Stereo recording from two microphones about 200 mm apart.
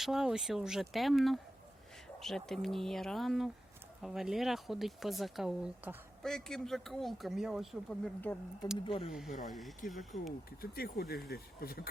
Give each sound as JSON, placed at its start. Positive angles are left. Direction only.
{"t": 0.0, "sound": "speech", "side_deg": 0}
{"t": 8.8, "sound": "speech", "side_deg": 25}
{"t": 9.5, "sound": "speech", "side_deg": 0}
{"t": 10.6, "sound": "speech", "side_deg": 50}